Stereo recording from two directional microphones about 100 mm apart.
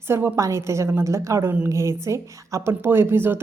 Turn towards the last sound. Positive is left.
turn(degrees=-20)  # may be behind; listen again after turning